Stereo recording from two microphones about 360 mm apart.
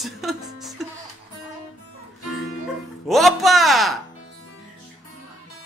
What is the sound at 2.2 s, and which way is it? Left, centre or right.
Music, left.